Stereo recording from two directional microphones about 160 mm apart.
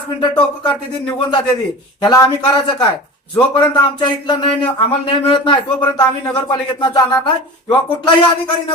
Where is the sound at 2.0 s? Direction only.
30° left (ahead or behind).